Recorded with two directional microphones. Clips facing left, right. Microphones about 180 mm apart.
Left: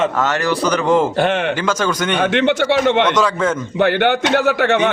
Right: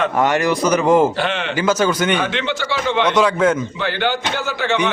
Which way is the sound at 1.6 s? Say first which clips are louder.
Right 2 dB; 10° right (ahead or behind).